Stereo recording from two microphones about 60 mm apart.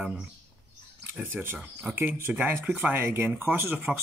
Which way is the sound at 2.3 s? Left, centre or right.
Centre.